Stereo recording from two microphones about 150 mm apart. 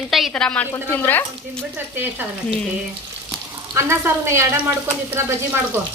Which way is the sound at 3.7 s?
20° right (ahead or behind).